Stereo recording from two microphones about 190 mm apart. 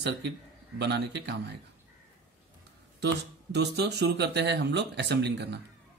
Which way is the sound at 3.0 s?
65° right (ahead or behind).